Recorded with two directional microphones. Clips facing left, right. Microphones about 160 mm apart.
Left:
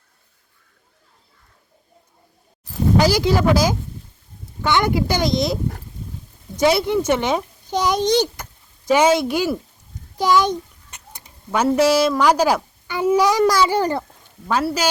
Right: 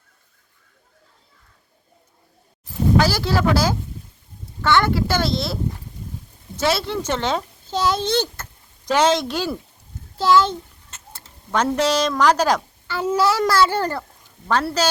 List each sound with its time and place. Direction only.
3.0 s speech: 15° left (ahead or behind)
6.6 s a child's voice: 15° left (ahead or behind)